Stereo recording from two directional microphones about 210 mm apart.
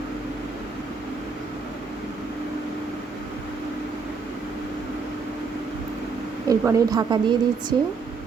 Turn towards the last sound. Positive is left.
turn(degrees=-20)  # may be behind; listen again after turning